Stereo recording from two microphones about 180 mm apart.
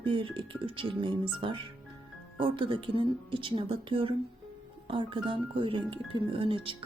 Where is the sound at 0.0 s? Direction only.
30° right (ahead or behind).